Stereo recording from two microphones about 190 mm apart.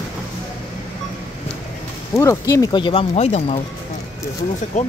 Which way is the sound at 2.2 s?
15° left (ahead or behind).